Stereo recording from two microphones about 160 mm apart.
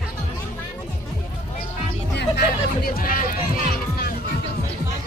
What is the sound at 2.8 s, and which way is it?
Speech, 65° left (ahead or behind).